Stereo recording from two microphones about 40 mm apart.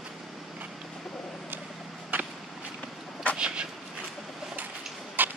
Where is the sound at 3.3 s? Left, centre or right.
Right.